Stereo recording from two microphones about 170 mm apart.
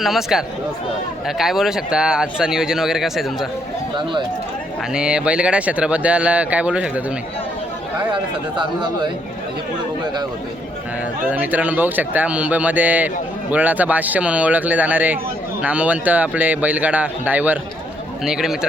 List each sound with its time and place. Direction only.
0.0 s speech: centre (ahead or behind)
4.9 s speech: 5° right (ahead or behind)
8.1 s speech: 30° right (ahead or behind)
11.3 s speech: 10° right (ahead or behind)